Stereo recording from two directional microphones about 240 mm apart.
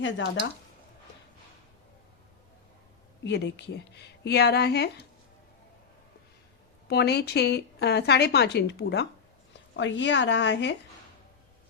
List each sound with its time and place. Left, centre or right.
0.0 s a woman's voice: left
3.2 s a woman's voice: left
6.8 s a woman's voice: left